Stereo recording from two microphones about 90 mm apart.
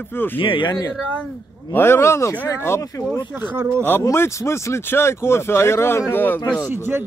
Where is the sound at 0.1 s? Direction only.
25° left (ahead or behind).